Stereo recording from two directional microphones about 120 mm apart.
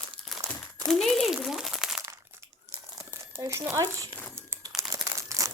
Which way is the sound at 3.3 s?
25° right (ahead or behind).